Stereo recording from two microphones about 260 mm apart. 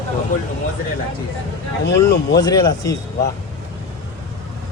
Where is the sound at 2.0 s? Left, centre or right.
Centre.